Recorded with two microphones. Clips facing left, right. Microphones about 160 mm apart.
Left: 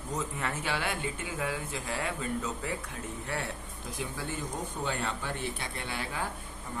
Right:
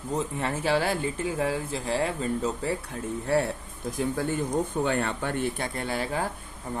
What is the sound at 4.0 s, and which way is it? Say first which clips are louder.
Speech: right 9 dB; 55° right (ahead or behind).